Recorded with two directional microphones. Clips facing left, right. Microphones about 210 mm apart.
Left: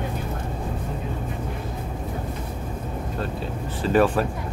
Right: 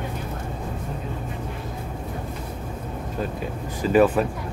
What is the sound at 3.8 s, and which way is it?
Speech, 5° right (ahead or behind).